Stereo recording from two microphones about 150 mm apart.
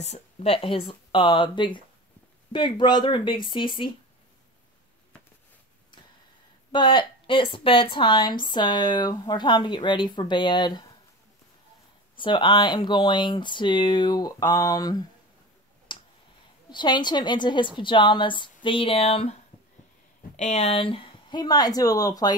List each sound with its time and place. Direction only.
0.0 s a woman's voice: 45° left (ahead or behind)
6.7 s a woman's voice: 30° left (ahead or behind)
12.2 s a woman's voice: 30° left (ahead or behind)
15.9 s tick: 35° left (ahead or behind)
16.7 s a woman's voice: 30° left (ahead or behind)
20.3 s speech: 50° left (ahead or behind); by 22.4 s 25° left (ahead or behind)